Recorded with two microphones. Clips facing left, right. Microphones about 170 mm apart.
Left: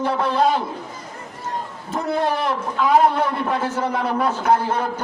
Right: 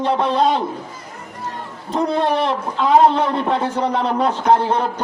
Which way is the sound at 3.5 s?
25° right (ahead or behind).